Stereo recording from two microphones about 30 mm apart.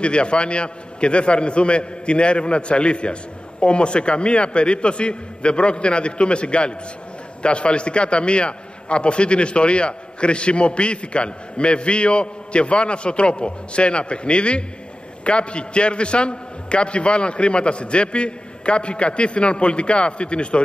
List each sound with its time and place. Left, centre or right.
0.0 s a man's voice: left